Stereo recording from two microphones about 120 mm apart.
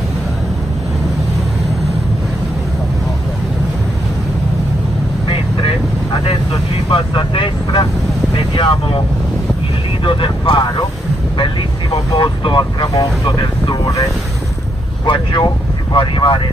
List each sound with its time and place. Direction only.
5.3 s vehicle: 45° left (ahead or behind)
10.0 s vehicle: 45° left (ahead or behind)
15.0 s speech: 40° left (ahead or behind)